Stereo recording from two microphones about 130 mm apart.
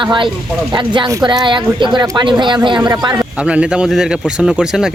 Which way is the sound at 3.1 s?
10° right (ahead or behind).